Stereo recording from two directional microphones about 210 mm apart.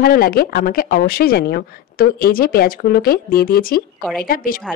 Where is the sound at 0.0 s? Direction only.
45° left (ahead or behind).